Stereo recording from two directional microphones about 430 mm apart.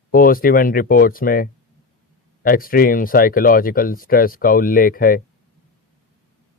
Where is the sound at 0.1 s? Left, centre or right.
Centre.